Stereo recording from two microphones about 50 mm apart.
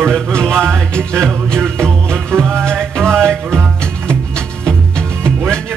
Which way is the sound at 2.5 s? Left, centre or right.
Centre.